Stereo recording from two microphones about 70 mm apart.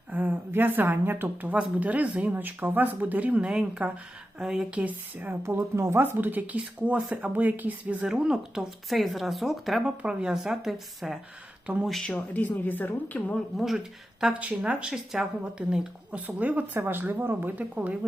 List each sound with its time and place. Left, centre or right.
0.1 s speech: right; by 4.8 s centre
4.8 s speech: right
5.4 s speech: right
6.1 s speech: right
8.0 s speech: centre
10.0 s speech: centre
11.6 s speech: centre
11.9 s speech: centre
12.1 s speech: left
13.6 s speech: centre
14.3 s speech: centre
16.2 s speech: right